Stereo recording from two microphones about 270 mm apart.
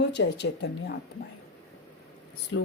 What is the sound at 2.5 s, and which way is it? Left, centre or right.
Speech, left.